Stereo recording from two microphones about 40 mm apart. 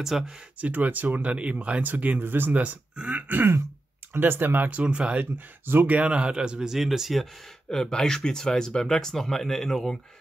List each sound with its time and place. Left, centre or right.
0.1 s speech: centre
0.6 s speech: right
2.1 s speech: right
2.5 s speech: right
4.1 s speech: right
4.8 s speech: right
5.2 s speech: right
5.9 s speech: right
6.7 s speech: centre
7.7 s speech: centre